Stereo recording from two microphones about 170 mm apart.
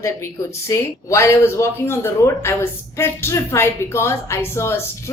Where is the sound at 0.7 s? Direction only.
15° left (ahead or behind).